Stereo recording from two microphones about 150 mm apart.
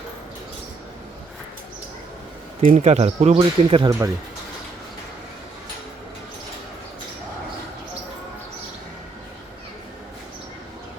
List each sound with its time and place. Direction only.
2.6 s speech: 50° right (ahead or behind)
3.8 s speech: 20° right (ahead or behind)